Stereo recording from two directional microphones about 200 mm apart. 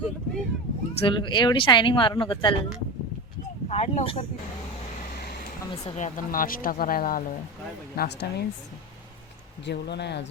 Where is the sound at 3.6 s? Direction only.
30° left (ahead or behind).